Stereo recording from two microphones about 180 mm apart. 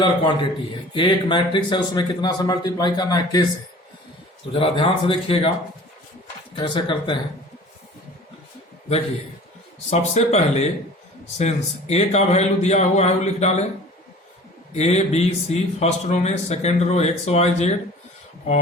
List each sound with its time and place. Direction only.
0.0 s speech: 25° left (ahead or behind)
4.5 s speech: 30° left (ahead or behind)
6.6 s speech: 25° left (ahead or behind)
9.9 s a man's voice: 40° left (ahead or behind)
14.7 s a man's voice: 35° left (ahead or behind)